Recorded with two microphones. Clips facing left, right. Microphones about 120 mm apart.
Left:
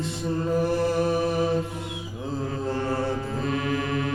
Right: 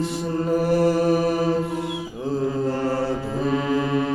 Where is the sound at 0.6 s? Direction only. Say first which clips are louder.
Right 6 dB; 80° right.